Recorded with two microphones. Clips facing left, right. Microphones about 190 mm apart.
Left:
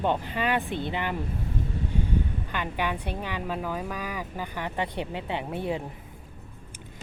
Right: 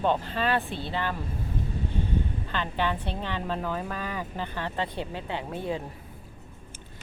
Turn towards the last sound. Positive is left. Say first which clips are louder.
# left 1 dB
turn(degrees=20)  # may be behind; listen again after turning